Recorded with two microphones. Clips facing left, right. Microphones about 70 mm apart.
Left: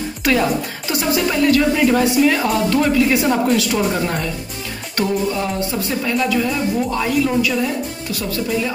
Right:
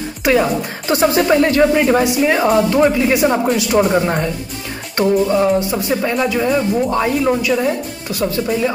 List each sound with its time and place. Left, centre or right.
0.2 s speech: centre
0.8 s music: right
2.2 s speech: right